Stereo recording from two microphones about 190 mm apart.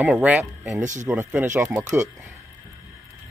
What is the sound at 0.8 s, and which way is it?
Speech, 40° right (ahead or behind).